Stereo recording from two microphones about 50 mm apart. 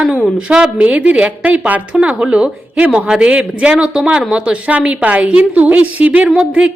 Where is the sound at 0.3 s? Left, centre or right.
Right.